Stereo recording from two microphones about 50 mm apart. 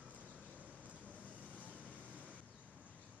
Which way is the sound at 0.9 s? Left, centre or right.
Right.